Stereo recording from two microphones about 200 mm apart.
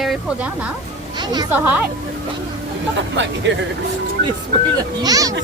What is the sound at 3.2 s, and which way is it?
Speech, 65° right (ahead or behind).